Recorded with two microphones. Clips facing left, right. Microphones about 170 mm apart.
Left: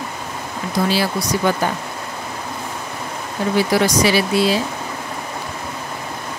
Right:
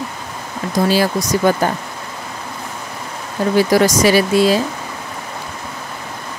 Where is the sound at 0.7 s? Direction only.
45° right (ahead or behind).